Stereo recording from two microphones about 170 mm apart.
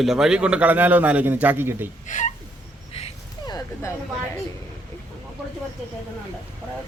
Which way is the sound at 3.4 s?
20° left (ahead or behind).